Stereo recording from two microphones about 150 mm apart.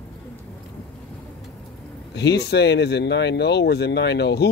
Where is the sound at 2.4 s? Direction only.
90° left.